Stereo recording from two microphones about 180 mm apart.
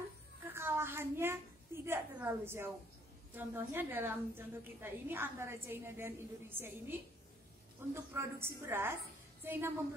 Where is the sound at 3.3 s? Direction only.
10° right (ahead or behind).